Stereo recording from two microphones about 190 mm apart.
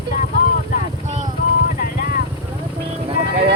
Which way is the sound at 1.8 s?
50° left (ahead or behind).